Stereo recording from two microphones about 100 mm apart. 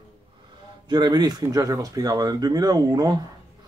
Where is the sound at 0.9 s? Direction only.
45° right (ahead or behind).